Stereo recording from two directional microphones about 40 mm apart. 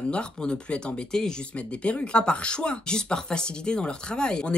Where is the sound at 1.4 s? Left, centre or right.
Left.